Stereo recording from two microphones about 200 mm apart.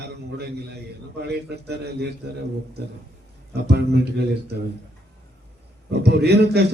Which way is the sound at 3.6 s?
55° right (ahead or behind).